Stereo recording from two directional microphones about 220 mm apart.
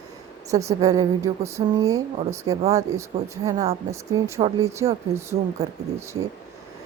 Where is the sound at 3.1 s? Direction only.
25° right (ahead or behind).